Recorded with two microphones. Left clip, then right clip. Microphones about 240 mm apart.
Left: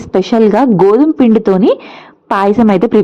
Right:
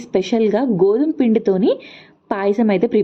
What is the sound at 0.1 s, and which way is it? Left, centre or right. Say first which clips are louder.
A woman's voice: left 7 dB; centre.